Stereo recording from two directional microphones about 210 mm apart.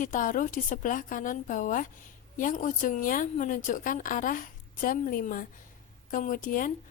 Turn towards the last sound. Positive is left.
turn(degrees=40)  # may be behind; listen again after turning